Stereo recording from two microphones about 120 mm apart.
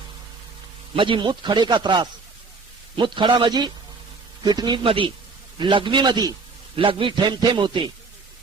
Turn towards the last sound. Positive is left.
turn(degrees=-40)  # may be behind; listen again after turning